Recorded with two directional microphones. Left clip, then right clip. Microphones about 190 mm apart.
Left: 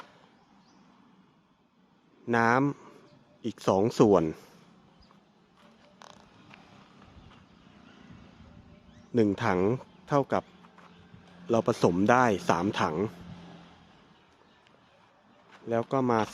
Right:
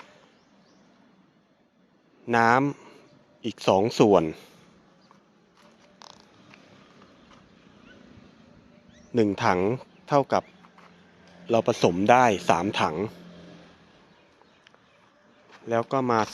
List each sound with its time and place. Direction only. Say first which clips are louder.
2.2 s speech: right 4 dB; 5° left (ahead or behind)
6.0 s a sound: right 2 dB; 40° right (ahead or behind)
9.1 s speech: right 3 dB; 10° left (ahead or behind)
11.4 s speech: right 3 dB; 10° left (ahead or behind)
15.6 s speech: right 3 dB; 10° left (ahead or behind)